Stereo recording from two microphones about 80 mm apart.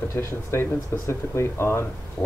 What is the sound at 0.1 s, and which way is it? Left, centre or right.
Speech, left.